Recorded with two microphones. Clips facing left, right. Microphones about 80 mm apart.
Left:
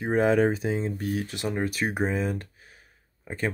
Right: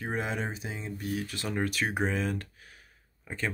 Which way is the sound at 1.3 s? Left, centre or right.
Left.